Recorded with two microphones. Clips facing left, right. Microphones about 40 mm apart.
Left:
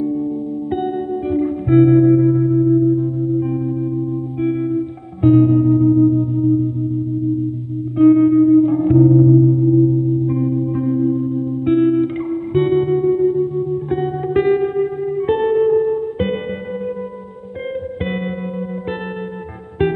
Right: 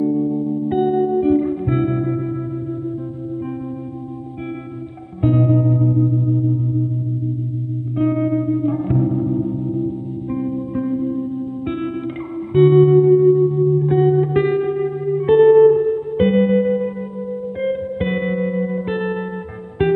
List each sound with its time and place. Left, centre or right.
0.7 s music: centre
5.2 s music: centre
8.0 s music: centre
18.0 s music: centre